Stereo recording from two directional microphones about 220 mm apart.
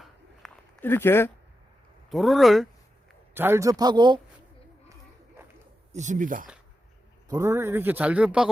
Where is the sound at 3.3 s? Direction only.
10° right (ahead or behind).